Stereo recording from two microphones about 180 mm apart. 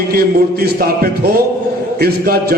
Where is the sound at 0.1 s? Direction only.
60° right (ahead or behind).